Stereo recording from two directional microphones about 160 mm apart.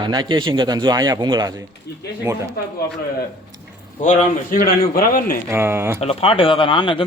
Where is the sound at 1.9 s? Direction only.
90° left.